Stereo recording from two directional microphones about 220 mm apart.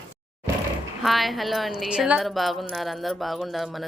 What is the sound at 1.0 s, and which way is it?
Dishes, centre (ahead or behind).